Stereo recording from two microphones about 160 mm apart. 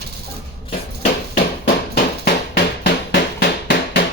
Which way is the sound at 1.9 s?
85° left.